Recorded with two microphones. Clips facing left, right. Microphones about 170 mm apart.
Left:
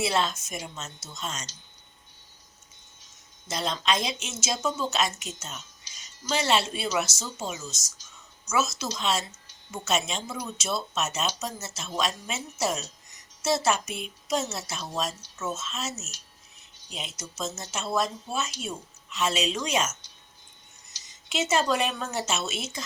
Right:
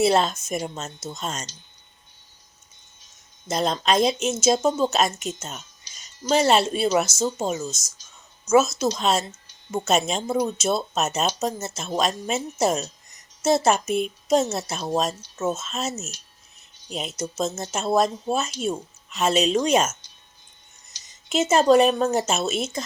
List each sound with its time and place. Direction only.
0.0 s speech: 50° right (ahead or behind)
3.5 s speech: 45° right (ahead or behind)
17.2 s speech: 50° right (ahead or behind)
21.2 s speech: 45° right (ahead or behind)